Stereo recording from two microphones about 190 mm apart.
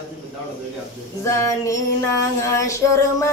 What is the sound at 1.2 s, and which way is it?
Female singing, 15° left (ahead or behind).